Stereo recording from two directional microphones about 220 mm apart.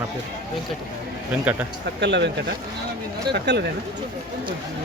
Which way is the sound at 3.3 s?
50° right (ahead or behind).